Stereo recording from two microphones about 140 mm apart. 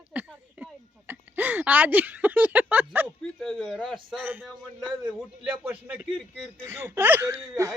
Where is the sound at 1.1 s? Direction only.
15° right (ahead or behind).